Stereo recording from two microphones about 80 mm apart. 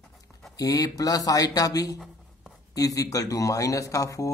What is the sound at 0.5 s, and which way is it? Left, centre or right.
Speech, left.